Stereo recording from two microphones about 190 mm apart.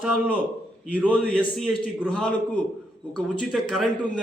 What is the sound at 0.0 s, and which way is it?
Speech, 5° right (ahead or behind).